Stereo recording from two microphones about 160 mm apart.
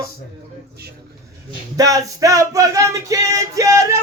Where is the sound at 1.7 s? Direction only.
20° right (ahead or behind).